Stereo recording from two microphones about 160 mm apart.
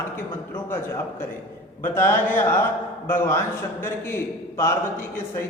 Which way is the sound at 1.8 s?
15° left (ahead or behind).